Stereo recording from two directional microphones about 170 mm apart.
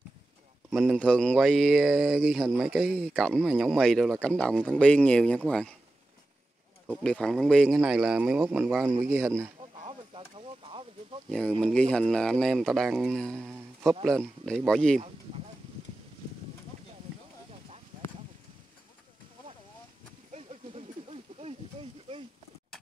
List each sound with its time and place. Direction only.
0.7 s speech: centre (ahead or behind)
7.0 s a man's voice: 5° left (ahead or behind); by 9.5 s 15° right (ahead or behind)
9.8 s a sound: 35° right (ahead or behind)
11.2 s speech: centre (ahead or behind)
17.5 s clip-clop: 35° right (ahead or behind)
20.3 s a sound: 35° right (ahead or behind)